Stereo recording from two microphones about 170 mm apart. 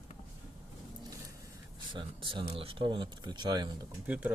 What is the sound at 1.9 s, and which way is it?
Speech, 30° right (ahead or behind).